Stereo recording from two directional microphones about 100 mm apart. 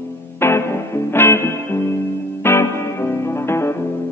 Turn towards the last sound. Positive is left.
turn(degrees=25)  # may be behind; listen again after turning